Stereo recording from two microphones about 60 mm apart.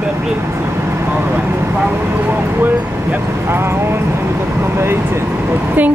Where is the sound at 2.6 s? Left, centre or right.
Right.